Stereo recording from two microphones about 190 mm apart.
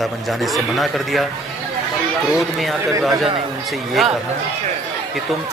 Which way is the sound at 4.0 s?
Centre (ahead or behind).